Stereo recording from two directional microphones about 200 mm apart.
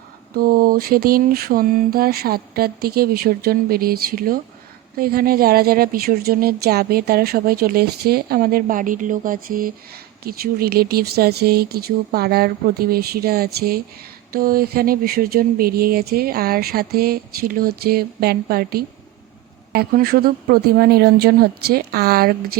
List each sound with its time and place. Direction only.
0.3 s speech: 45° right (ahead or behind)